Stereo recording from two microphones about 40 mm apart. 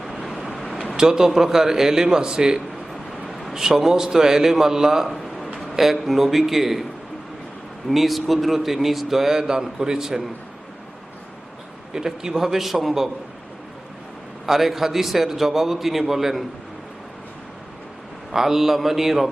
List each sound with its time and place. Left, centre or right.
0.9 s a man's voice: centre
2.9 s vehicle: centre
3.5 s a man's voice: centre
5.0 s a sound: centre
5.5 s a man's voice: centre
7.9 s a man's voice: centre
9.4 s a man's voice: centre
11.9 s a man's voice: centre
14.4 s a man's voice: centre
18.3 s a man's voice: centre